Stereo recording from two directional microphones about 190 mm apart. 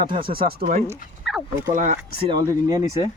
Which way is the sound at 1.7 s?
40° right (ahead or behind).